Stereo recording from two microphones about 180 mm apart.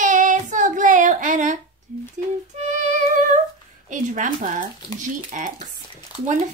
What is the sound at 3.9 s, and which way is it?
Child singing, 45° right (ahead or behind).